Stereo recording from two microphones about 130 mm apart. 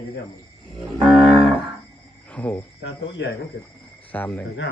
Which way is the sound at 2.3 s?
10° left (ahead or behind).